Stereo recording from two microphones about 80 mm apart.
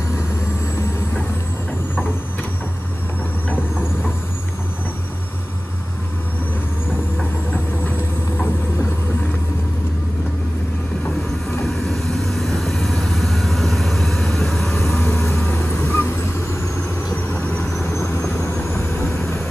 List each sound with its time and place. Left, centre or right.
11.6 s vehicle: centre
15.4 s vehicle: centre
17.3 s vehicle: centre
17.9 s vehicle: left
18.4 s vehicle: left